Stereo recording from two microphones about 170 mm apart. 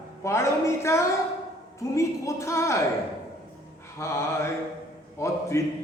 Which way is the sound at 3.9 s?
15° left (ahead or behind).